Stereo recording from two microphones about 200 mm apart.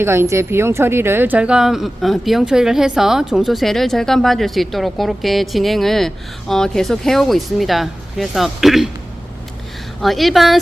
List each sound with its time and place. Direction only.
0.0 s speech: 10° right (ahead or behind)
10.0 s speech: centre (ahead or behind)